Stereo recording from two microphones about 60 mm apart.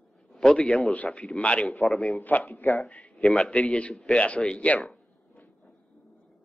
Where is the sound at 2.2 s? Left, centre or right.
Left.